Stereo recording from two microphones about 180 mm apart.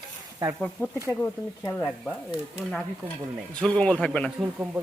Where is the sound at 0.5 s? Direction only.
5° left (ahead or behind).